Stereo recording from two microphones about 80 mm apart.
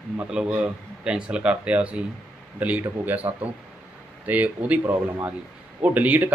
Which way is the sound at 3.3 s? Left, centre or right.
Right.